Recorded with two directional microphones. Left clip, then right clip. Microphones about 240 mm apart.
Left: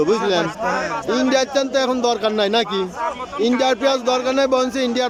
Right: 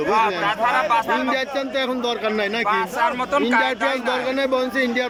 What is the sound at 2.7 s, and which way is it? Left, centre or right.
Speech, right.